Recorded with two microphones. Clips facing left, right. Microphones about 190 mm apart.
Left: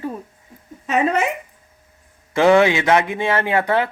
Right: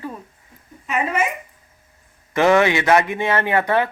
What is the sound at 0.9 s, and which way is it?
Speech, 70° left (ahead or behind).